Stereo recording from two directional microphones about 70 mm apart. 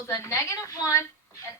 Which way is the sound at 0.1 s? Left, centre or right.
Left.